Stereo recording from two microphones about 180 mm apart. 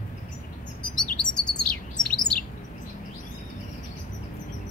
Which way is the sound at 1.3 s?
5° left (ahead or behind).